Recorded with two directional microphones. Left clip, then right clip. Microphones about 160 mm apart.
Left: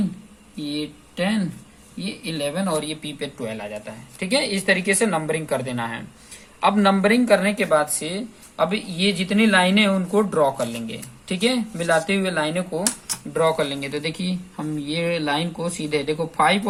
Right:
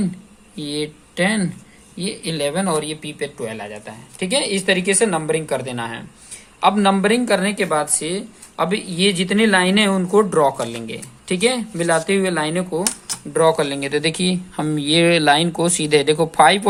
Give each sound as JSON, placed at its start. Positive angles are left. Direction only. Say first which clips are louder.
{"t": 0.5, "sound": "speech", "louder": "right 4 dB", "side_deg": -70}